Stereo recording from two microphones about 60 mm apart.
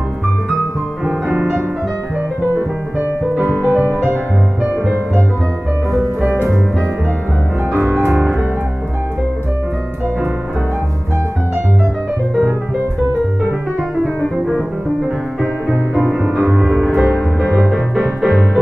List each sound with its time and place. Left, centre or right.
1.0 s music: right
3.7 s music: right
15.7 s music: centre